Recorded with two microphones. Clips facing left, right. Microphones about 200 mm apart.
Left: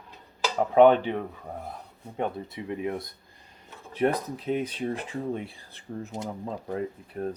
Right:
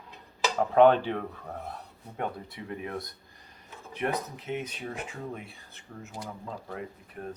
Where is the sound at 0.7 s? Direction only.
20° left (ahead or behind).